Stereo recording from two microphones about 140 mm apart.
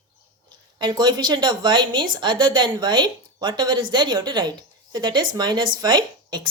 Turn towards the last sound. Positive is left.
turn(degrees=-30)  # may be behind; listen again after turning